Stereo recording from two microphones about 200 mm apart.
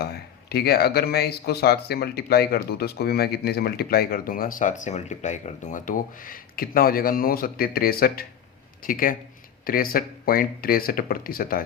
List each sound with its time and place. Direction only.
0.0 s speech: 50° left (ahead or behind)